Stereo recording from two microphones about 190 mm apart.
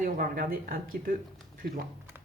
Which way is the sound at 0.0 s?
50° right (ahead or behind).